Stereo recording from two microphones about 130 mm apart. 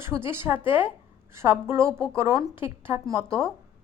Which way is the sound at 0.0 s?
20° right (ahead or behind).